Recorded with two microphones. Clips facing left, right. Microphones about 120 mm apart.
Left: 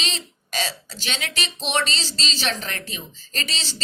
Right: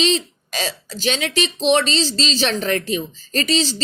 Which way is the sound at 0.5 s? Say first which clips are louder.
Right 3 dB; 40° right (ahead or behind).